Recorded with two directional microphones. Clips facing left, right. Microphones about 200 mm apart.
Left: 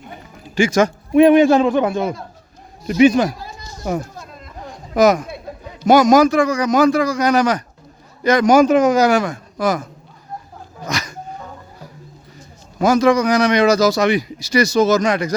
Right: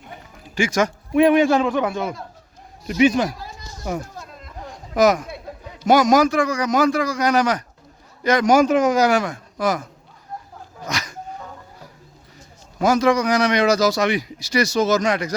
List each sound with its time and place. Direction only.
0.4 s a man's voice: 30° left (ahead or behind)
2.8 s a man's voice: 45° left (ahead or behind)
4.9 s a man's voice: 25° left (ahead or behind)
8.5 s a man's voice: 60° left (ahead or behind)
9.0 s a man's voice: 40° left (ahead or behind)
10.8 s dog: 40° left (ahead or behind)
12.8 s a man's voice: 45° left (ahead or behind)